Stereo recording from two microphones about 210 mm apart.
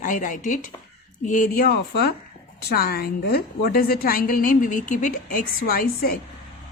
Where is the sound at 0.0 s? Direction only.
40° left (ahead or behind).